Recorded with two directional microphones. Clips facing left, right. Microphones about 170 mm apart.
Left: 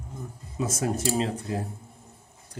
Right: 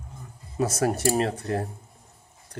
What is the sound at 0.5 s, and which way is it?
Speech, 70° right (ahead or behind).